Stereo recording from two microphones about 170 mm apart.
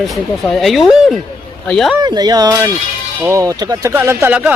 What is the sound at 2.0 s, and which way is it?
A man's voice, 25° right (ahead or behind).